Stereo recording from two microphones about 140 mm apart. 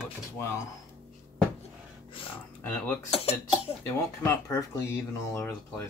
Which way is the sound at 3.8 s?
20° left (ahead or behind).